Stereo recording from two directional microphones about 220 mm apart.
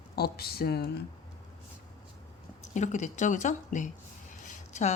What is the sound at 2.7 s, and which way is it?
Speech, 35° left (ahead or behind).